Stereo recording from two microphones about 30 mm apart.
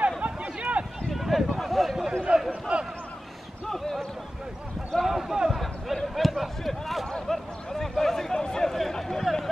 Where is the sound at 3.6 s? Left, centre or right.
Centre.